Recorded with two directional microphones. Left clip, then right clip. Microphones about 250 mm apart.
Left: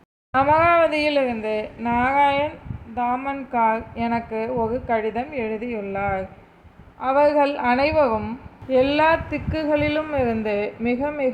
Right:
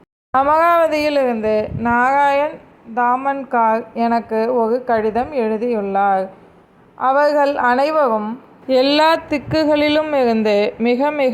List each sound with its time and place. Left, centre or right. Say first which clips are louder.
0.3 s speech: right 3 dB; right
8.7 s a woman's voice: right 4 dB; right